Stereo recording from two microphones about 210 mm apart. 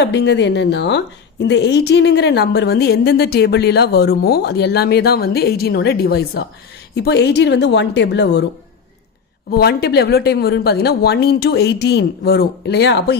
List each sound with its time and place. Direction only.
0.0 s a woman's voice: 55° left (ahead or behind)
9.5 s a woman's voice: 50° left (ahead or behind)